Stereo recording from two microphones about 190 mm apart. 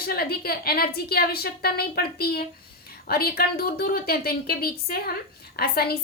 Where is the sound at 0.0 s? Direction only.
55° left (ahead or behind).